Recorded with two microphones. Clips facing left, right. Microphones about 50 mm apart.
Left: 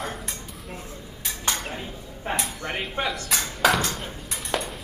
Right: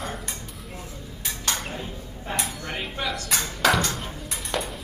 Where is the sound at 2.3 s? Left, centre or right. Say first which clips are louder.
Left 1 dB; left.